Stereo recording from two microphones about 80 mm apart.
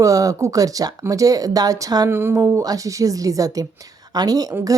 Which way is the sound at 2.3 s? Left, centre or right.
Right.